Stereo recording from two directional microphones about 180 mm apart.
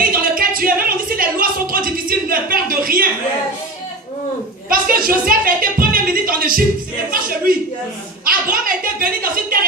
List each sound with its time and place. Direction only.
0.2 s a sound: 50° right (ahead or behind)
4.7 s music: 55° right (ahead or behind)
7.1 s a woman's voice: 55° right (ahead or behind)